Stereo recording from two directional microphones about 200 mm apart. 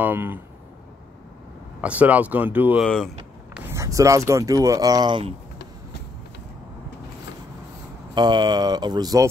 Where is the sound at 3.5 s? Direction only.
15° right (ahead or behind).